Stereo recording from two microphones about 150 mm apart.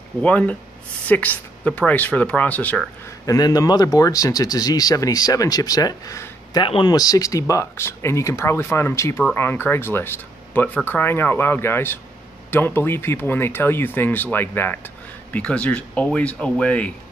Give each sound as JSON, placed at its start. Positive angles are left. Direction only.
{"t": 0.2, "sound": "speech", "side_deg": 10}
{"t": 3.3, "sound": "speech", "side_deg": 25}
{"t": 6.6, "sound": "speech", "side_deg": 35}